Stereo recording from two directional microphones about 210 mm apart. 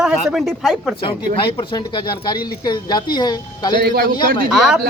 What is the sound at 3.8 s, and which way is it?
Speech, 45° right (ahead or behind).